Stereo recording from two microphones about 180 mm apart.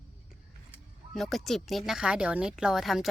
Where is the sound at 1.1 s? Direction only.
Centre (ahead or behind).